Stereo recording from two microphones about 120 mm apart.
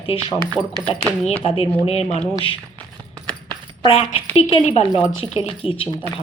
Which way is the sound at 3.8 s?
50° left (ahead or behind).